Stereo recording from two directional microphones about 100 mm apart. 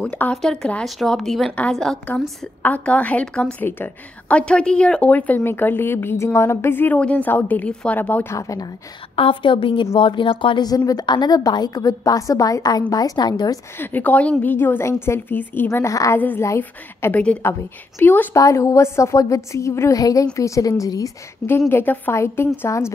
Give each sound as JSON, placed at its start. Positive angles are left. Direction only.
{"t": 0.0, "sound": "speech", "side_deg": 10}
{"t": 8.4, "sound": "a woman's voice", "side_deg": 35}
{"t": 9.1, "sound": "a woman's voice", "side_deg": 65}
{"t": 10.7, "sound": "a woman's voice", "side_deg": 40}
{"t": 13.7, "sound": "a woman's voice", "side_deg": 15}
{"t": 16.2, "sound": "speech", "side_deg": 15}
{"t": 17.4, "sound": "a woman's voice", "side_deg": 25}
{"t": 18.3, "sound": "a woman's voice", "side_deg": 30}
{"t": 21.5, "sound": "a woman's voice", "side_deg": 25}